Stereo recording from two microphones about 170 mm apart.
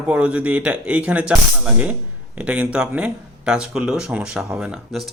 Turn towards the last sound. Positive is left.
turn(degrees=0)  # may be behind; listen again after turning